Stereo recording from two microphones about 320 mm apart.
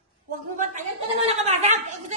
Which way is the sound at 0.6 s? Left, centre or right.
Right.